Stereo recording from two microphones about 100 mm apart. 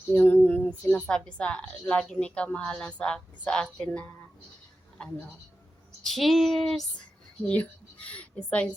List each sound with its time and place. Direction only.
0.1 s a sound: 20° left (ahead or behind)
0.9 s a woman's voice: 15° left (ahead or behind)
6.0 s speech: centre (ahead or behind)
7.4 s a woman's voice: 15° left (ahead or behind)